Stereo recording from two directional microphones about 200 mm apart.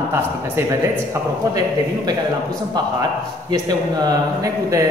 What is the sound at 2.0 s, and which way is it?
A man's voice, 20° right (ahead or behind).